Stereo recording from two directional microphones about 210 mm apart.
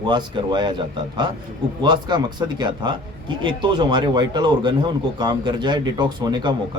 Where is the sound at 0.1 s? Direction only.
20° right (ahead or behind).